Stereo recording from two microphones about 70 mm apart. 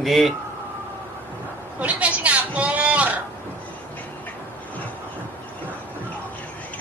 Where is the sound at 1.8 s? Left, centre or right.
Centre.